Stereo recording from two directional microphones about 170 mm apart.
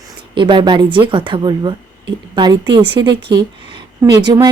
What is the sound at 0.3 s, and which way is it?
A woman's voice, 30° right (ahead or behind).